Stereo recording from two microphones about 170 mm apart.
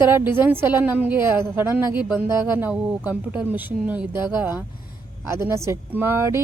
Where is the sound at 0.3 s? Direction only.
10° right (ahead or behind).